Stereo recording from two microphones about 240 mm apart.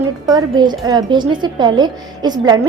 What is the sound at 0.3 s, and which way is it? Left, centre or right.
A woman's voice, centre.